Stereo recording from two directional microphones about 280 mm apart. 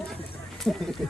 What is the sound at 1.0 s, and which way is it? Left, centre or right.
Speech, centre.